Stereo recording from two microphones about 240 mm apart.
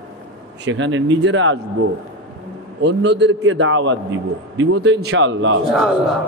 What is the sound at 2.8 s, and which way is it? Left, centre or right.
A man's voice, right.